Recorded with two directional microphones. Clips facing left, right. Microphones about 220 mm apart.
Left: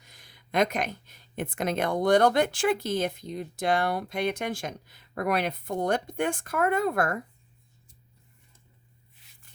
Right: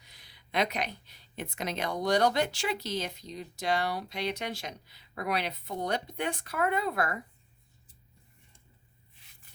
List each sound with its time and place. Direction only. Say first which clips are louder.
0.0 s speech: left 4 dB; 45° left (ahead or behind)